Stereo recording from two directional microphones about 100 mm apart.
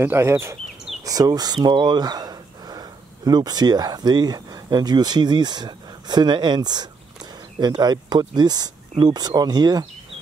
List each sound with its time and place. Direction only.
0.0 s speech: 25° right (ahead or behind)
1.0 s speech: 40° right (ahead or behind)